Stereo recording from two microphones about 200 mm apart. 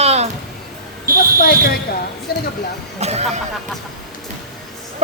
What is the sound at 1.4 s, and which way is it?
Speech, 50° left (ahead or behind).